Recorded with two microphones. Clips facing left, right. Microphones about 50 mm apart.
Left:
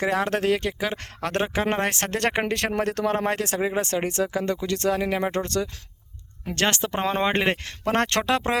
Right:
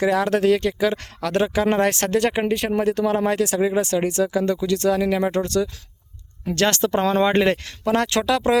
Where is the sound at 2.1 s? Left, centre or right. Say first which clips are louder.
Right 2 dB; left.